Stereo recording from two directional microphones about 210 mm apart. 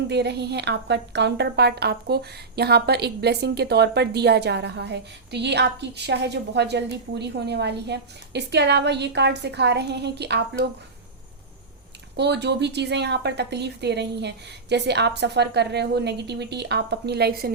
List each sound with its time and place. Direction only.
0.1 s a woman's voice: 55° right (ahead or behind)
12.1 s a woman's voice: 55° right (ahead or behind)